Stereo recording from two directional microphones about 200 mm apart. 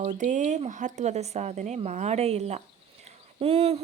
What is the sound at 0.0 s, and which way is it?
Speech, 40° right (ahead or behind).